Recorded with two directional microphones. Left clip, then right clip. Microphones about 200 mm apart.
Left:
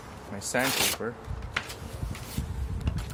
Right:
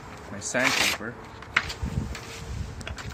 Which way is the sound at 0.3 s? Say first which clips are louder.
Right 1 dB; 50° left (ahead or behind).